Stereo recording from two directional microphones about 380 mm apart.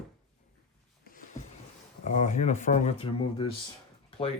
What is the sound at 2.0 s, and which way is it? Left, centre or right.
Speech, centre.